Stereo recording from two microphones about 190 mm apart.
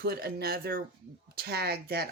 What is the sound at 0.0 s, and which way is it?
Speech, 55° right (ahead or behind).